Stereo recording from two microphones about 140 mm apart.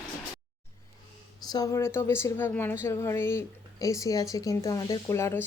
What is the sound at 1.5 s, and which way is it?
Speech, 25° left (ahead or behind).